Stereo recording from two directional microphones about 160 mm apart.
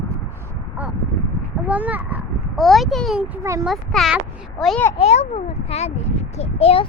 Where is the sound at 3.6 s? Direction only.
Centre (ahead or behind).